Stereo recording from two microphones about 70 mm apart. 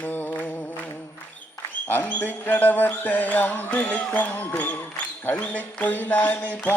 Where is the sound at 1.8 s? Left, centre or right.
Left.